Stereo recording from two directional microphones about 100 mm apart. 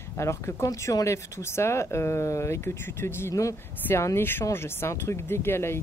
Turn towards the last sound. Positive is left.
turn(degrees=25)  # may be behind; listen again after turning